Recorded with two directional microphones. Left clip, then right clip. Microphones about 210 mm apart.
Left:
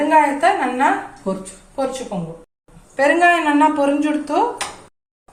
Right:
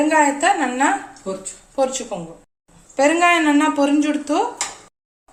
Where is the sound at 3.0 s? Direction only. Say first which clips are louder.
Left 1 dB; 55° right (ahead or behind).